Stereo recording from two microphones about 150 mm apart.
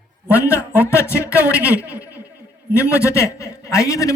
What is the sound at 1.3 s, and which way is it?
Speech, 10° right (ahead or behind).